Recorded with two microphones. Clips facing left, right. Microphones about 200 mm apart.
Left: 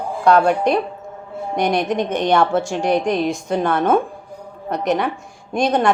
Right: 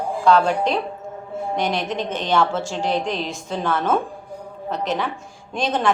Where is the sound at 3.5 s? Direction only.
65° left (ahead or behind).